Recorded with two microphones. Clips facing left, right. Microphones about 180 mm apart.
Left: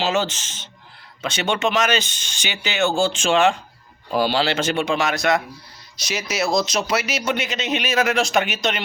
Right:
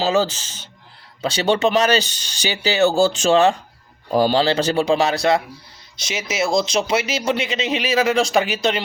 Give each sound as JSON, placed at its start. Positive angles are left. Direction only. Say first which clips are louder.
{"t": 0.0, "sound": "speech", "louder": "right 3 dB", "side_deg": -35}